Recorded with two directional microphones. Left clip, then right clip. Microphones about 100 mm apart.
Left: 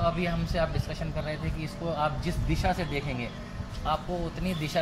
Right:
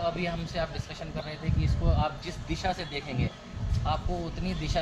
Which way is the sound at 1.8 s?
20° left (ahead or behind).